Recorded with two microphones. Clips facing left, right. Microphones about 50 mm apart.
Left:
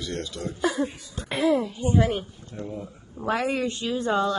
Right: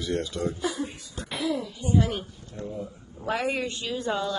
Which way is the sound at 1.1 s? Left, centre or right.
Left.